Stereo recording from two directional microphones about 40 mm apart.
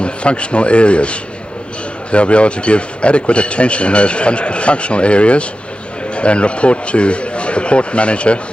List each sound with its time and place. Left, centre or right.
0.0 s speech: left